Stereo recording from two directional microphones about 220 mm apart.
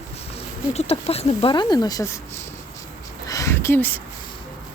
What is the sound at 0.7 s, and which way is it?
Speech, 30° left (ahead or behind).